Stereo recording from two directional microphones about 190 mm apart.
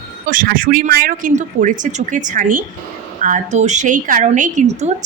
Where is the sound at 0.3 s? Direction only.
45° right (ahead or behind).